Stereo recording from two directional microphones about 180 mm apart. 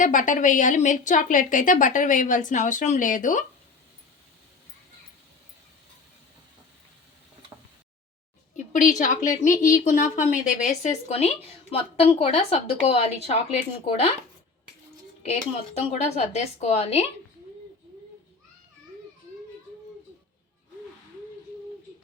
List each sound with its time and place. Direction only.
0.0 s a woman's voice: 45° left (ahead or behind)
8.5 s a woman's voice: 45° left (ahead or behind)
15.2 s a woman's voice: 35° left (ahead or behind)